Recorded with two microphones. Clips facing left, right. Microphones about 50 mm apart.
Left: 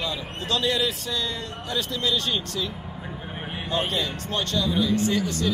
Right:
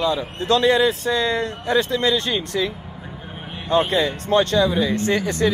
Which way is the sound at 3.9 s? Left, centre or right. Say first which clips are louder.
Right 9 dB; right.